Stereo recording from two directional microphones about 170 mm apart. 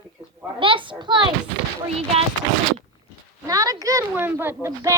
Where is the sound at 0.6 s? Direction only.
30° right (ahead or behind).